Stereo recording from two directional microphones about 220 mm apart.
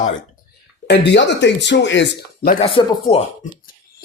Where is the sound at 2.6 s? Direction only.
25° left (ahead or behind).